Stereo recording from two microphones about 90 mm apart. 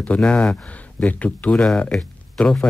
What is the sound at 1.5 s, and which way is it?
Speech, 5° left (ahead or behind).